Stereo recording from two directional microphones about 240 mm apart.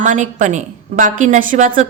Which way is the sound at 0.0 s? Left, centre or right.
Right.